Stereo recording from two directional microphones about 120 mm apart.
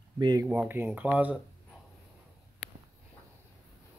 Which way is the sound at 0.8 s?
20° right (ahead or behind).